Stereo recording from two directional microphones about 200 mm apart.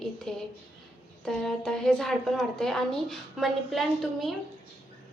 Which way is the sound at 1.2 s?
5° left (ahead or behind).